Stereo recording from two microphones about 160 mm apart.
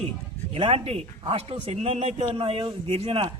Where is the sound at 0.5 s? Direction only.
35° right (ahead or behind).